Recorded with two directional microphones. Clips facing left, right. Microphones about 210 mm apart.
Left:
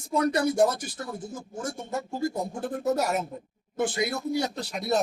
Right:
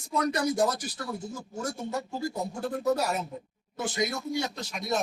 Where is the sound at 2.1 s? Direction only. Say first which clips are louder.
Left 3 dB; 50° left (ahead or behind).